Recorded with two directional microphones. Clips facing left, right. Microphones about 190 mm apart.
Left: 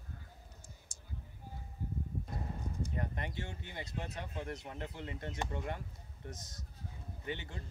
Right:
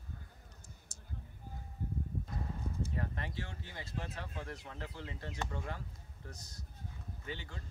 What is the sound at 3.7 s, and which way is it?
Speech, 20° left (ahead or behind).